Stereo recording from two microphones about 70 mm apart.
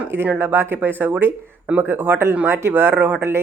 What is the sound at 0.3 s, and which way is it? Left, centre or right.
Speech, right.